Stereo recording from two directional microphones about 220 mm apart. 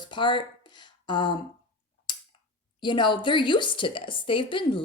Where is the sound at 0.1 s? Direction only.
20° left (ahead or behind).